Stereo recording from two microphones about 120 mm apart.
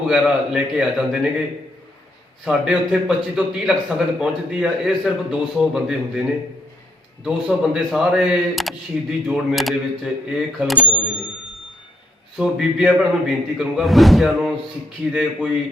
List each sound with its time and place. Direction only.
0.0 s a man's voice: 5° right (ahead or behind)
2.4 s a man's voice: 5° right (ahead or behind)
12.4 s a man's voice: 5° right (ahead or behind)